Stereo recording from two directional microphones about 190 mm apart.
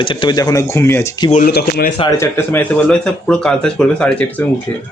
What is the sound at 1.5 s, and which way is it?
Speech, 55° left (ahead or behind).